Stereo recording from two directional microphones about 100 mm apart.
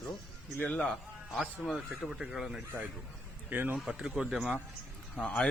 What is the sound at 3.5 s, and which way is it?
Speech, 20° right (ahead or behind).